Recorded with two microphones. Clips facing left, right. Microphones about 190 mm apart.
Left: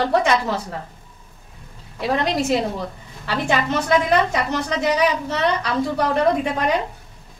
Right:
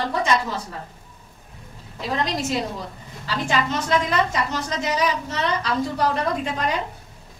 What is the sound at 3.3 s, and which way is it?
A woman's voice, 60° left (ahead or behind).